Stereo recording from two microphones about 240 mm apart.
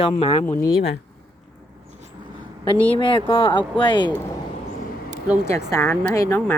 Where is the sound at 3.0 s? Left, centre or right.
Left.